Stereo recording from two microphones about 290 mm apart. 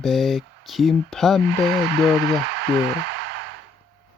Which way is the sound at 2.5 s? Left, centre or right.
Right.